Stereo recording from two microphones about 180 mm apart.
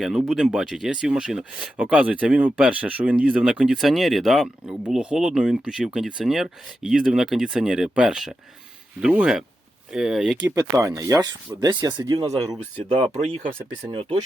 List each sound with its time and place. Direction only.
0.0 s speech: centre (ahead or behind)
10.4 s speech: 20° right (ahead or behind)
12.9 s speech: 35° right (ahead or behind)